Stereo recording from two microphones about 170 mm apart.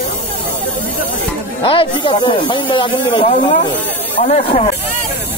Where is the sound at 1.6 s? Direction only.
30° left (ahead or behind).